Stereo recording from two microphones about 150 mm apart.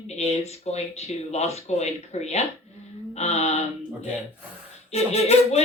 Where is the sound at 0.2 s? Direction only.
45° left (ahead or behind).